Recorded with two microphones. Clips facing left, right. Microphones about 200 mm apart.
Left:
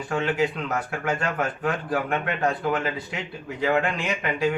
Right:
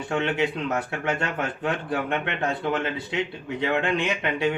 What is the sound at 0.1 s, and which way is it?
Speech, 25° right (ahead or behind).